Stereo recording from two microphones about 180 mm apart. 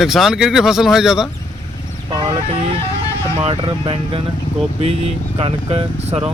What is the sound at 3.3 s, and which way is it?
Speech, 30° right (ahead or behind).